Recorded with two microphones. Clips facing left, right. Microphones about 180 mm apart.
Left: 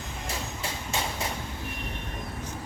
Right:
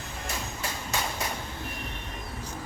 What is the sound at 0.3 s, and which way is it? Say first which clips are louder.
Train: even; 25° left (ahead or behind).